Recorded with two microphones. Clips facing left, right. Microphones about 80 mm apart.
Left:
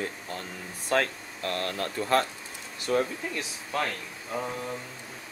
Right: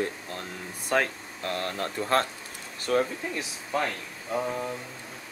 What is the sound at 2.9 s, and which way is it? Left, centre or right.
Speech, right.